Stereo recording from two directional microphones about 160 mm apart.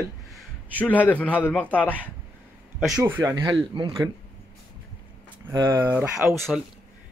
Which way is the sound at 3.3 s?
25° right (ahead or behind).